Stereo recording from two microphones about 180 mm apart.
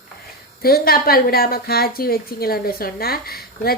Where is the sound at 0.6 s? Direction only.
55° left (ahead or behind).